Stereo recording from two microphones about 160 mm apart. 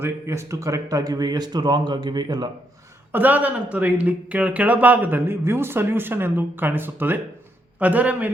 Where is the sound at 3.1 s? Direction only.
10° right (ahead or behind).